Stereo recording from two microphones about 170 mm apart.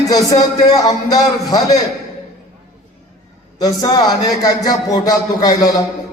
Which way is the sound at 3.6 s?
20° left (ahead or behind).